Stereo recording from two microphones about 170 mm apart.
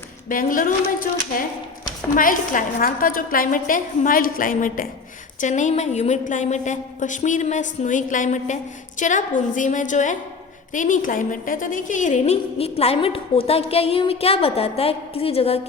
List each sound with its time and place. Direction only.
0.3 s a woman's voice: 55° left (ahead or behind)
2.1 s a woman's voice: 55° left (ahead or behind); by 15.6 s 35° left (ahead or behind)